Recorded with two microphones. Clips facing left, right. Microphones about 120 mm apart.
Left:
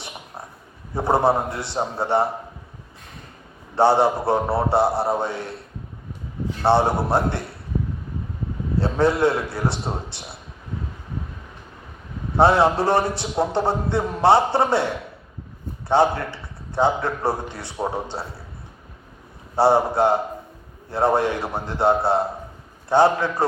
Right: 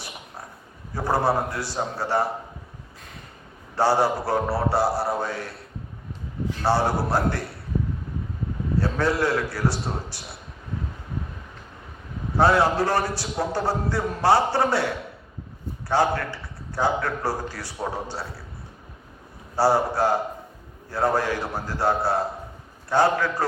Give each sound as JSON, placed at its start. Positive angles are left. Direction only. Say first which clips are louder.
{"t": 0.9, "sound": "a man's voice", "louder": "left 4 dB", "side_deg": 25}
{"t": 3.8, "sound": "a man's voice", "louder": "left 4 dB", "side_deg": 25}
{"t": 6.6, "sound": "a man's voice", "louder": "left 4 dB", "side_deg": 25}
{"t": 8.8, "sound": "a man's voice", "louder": "left 5 dB", "side_deg": 25}
{"t": 12.4, "sound": "a man's voice", "louder": "left 3 dB", "side_deg": 25}
{"t": 19.5, "sound": "a man's voice", "louder": "left 3 dB", "side_deg": 25}